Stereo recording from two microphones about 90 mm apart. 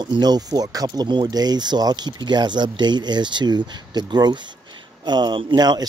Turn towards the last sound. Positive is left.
turn(degrees=-50)  # may be behind; listen again after turning